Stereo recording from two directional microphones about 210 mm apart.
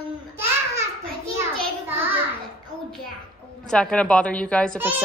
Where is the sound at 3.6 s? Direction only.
5° left (ahead or behind).